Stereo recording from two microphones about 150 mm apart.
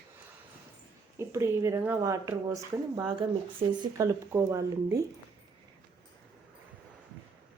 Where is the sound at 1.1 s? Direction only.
20° right (ahead or behind).